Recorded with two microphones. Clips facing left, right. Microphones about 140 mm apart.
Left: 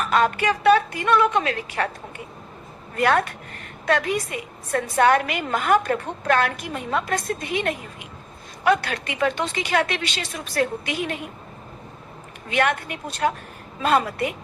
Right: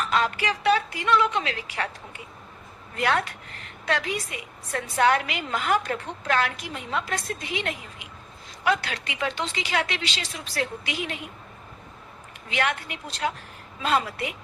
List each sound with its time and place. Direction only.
0.0 s a woman's voice: 50° left (ahead or behind)
12.5 s a woman's voice: 50° left (ahead or behind)